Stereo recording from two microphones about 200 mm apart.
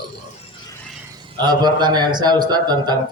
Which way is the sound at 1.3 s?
20° right (ahead or behind).